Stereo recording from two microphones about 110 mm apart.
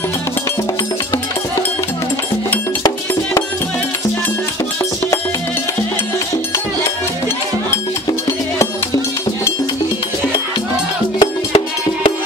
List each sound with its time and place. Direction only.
11.1 s music: 45° left (ahead or behind)